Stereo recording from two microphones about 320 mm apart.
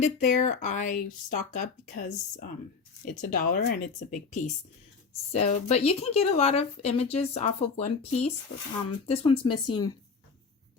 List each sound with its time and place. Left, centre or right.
0.0 s speech: left